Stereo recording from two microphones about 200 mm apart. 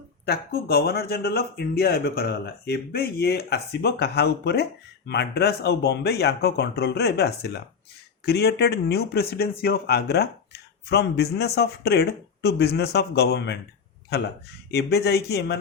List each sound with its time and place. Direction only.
0.3 s speech: 50° left (ahead or behind)